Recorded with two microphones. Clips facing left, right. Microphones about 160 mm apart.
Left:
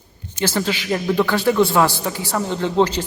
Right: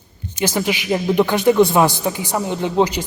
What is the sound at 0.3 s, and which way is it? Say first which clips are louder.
Speech: right 1 dB; 15° right (ahead or behind).